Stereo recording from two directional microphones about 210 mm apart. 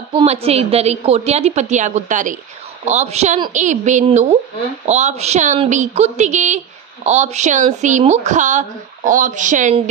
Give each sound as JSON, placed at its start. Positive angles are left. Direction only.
{"t": 0.1, "sound": "speech", "side_deg": -30}